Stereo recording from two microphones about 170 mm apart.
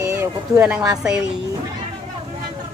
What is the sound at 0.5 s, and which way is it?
Speech, 5° right (ahead or behind).